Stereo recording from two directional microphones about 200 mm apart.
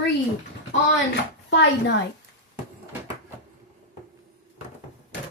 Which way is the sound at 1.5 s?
60° left (ahead or behind).